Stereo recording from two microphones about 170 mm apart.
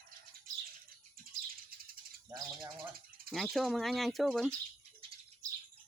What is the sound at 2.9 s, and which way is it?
Bird, 60° right (ahead or behind).